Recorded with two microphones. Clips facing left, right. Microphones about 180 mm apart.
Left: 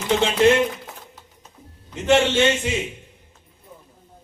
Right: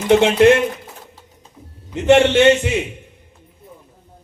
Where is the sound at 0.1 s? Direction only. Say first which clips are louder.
Right 6 dB; 60° right (ahead or behind).